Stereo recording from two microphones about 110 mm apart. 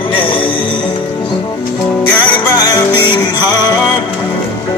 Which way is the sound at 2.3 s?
35° left (ahead or behind).